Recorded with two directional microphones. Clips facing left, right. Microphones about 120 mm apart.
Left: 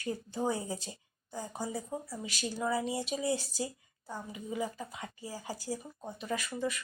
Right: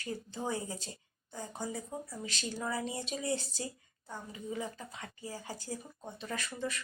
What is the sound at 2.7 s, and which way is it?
Speech, 25° left (ahead or behind).